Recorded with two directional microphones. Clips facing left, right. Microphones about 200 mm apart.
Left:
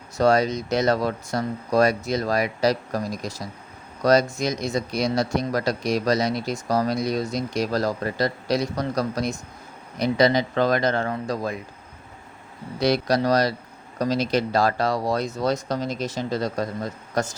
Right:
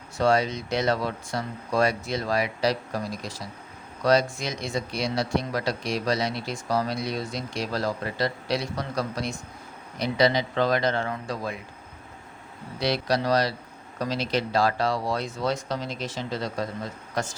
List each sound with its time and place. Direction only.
0.2 s speech: 40° left (ahead or behind)
12.8 s speech: 45° left (ahead or behind)